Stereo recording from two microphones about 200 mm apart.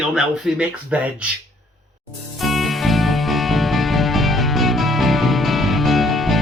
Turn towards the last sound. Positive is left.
turn(degrees=0)  # may be behind; listen again after turning